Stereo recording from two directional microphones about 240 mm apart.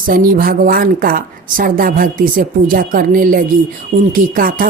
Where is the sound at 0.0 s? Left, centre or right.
Right.